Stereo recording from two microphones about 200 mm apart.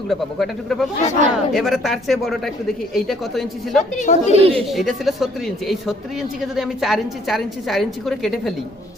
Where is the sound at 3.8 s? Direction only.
35° left (ahead or behind).